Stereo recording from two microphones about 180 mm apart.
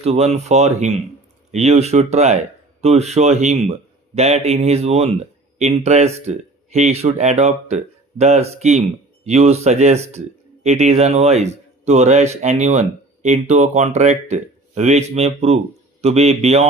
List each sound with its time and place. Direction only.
0.0 s speech: 35° right (ahead or behind)